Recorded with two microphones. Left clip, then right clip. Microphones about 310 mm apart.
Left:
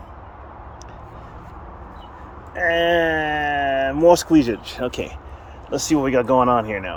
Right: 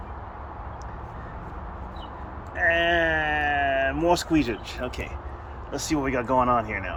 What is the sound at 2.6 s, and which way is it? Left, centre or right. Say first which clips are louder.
Speech: left 4 dB; left.